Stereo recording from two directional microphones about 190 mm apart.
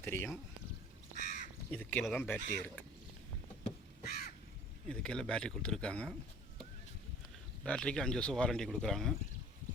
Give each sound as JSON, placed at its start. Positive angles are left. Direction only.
{"t": 0.0, "sound": "speech", "side_deg": 10}
{"t": 1.1, "sound": "crow", "side_deg": 40}
{"t": 1.7, "sound": "speech", "side_deg": 10}
{"t": 4.0, "sound": "crow", "side_deg": 55}
{"t": 4.9, "sound": "speech", "side_deg": 5}
{"t": 7.6, "sound": "speech", "side_deg": 5}